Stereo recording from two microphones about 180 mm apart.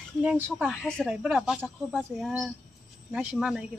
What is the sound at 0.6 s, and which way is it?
Speech, 5° left (ahead or behind).